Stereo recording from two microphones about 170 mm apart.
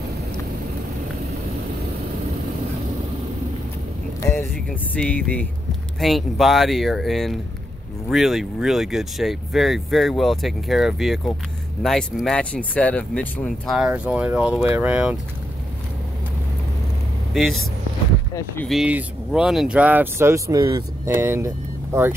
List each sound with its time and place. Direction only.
4.3 s speech: 5° left (ahead or behind)
17.3 s speech: centre (ahead or behind)
18.7 s speech: 5° right (ahead or behind)